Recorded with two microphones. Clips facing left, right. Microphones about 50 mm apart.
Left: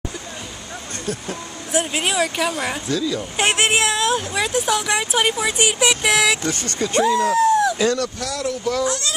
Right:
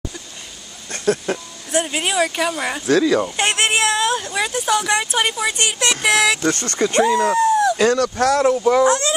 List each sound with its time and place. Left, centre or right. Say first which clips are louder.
1.0 s speech: right 9 dB; right
1.7 s speech: right 1 dB; centre
3.0 s speech: right 7 dB; right
3.3 s speech: even; centre
8.0 s speech: right 9 dB; right
8.6 s speech: right 7 dB; right